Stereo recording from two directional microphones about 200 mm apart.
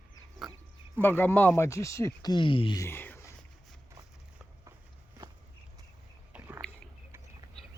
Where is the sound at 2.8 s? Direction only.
10° left (ahead or behind).